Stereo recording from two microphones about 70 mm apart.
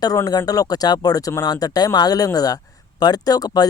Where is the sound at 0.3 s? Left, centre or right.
Left.